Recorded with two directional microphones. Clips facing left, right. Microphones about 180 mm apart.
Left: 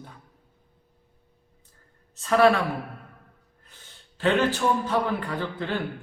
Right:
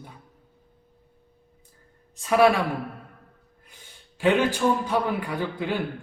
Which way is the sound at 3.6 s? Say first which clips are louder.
Right 1 dB; 10° right (ahead or behind).